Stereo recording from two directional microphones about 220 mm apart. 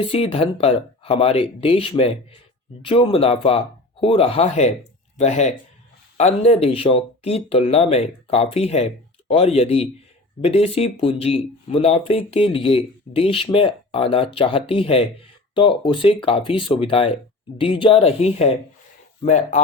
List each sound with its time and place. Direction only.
0.0 s speech: 25° left (ahead or behind)